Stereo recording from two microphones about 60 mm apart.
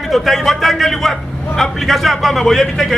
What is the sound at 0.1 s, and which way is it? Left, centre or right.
A man's voice, centre.